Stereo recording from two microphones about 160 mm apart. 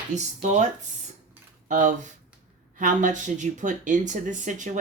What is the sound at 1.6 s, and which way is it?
Speech, 50° right (ahead or behind).